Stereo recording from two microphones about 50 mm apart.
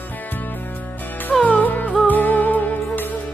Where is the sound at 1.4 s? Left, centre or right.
Left.